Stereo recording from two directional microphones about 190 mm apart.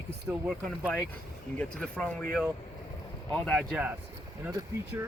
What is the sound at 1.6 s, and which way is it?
Speech, 5° left (ahead or behind).